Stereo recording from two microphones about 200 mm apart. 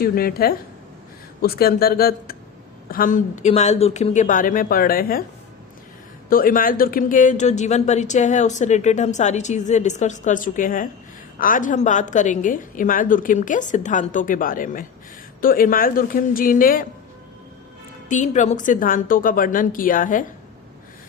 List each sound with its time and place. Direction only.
0.0 s a woman's voice: 50° left (ahead or behind)
6.3 s a woman's voice: 45° left (ahead or behind)
18.1 s a woman's voice: 35° left (ahead or behind)